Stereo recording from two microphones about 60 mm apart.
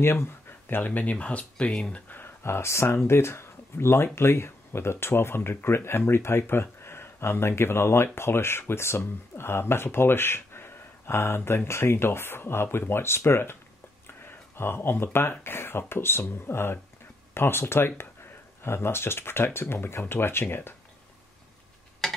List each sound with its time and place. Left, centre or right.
0.0 s speech: left
14.6 s speech: left
22.0 s a sound: centre